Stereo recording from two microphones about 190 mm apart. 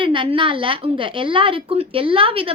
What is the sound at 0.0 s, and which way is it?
A woman's voice, 25° right (ahead or behind).